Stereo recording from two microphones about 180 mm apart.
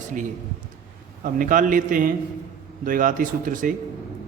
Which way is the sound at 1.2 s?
50° right (ahead or behind).